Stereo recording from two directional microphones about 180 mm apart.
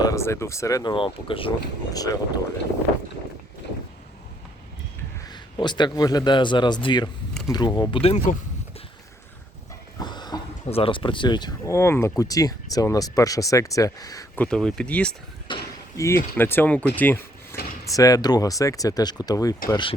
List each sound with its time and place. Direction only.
0.0 s speech: 15° left (ahead or behind)
5.3 s speech: 25° left (ahead or behind)
10.0 s speech: 25° left (ahead or behind)
14.3 s speech: 5° left (ahead or behind)
15.5 s basketball bounce: 25° left (ahead or behind)
16.0 s speech: 15° left (ahead or behind)